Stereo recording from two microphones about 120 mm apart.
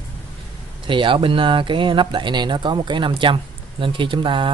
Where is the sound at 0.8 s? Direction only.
45° right (ahead or behind).